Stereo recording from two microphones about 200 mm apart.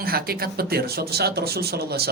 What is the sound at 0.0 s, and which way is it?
Speech, 50° right (ahead or behind).